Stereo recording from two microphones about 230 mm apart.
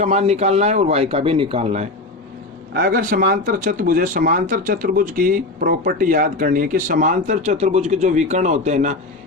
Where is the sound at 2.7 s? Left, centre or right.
Right.